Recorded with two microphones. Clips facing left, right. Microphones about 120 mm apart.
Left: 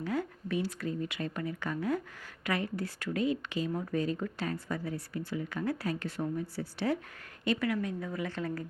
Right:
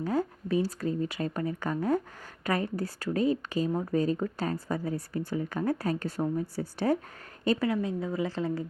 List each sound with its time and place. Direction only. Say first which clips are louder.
0.0 s speech: right 4 dB; 40° right (ahead or behind)
7.4 s a woman's voice: right 4 dB; 30° right (ahead or behind)